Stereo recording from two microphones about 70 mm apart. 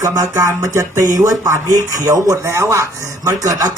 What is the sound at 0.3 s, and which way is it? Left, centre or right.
Speech, right.